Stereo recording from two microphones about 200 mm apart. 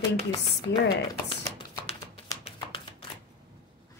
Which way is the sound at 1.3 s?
25° left (ahead or behind).